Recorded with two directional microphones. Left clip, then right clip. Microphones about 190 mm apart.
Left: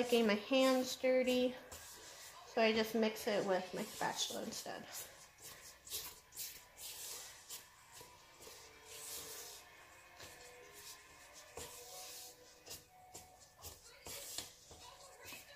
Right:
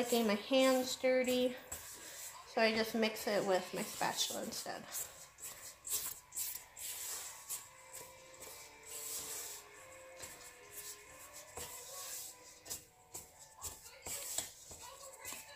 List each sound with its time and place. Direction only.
0.1 s speech: 15° left (ahead or behind)
2.5 s speech: 15° left (ahead or behind)
5.9 s a sound: 20° right (ahead or behind)